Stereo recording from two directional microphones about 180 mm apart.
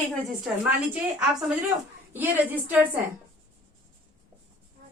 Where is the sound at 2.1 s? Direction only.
10° right (ahead or behind).